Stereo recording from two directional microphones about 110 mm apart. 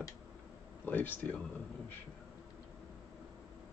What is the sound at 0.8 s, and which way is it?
Speech, 15° left (ahead or behind).